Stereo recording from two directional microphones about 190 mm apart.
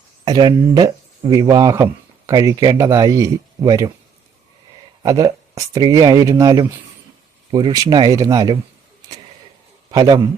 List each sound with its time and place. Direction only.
0.3 s speech: 20° right (ahead or behind)
5.0 s speech: 20° right (ahead or behind)
9.0 s vehicle: 20° right (ahead or behind)
9.9 s speech: 20° right (ahead or behind)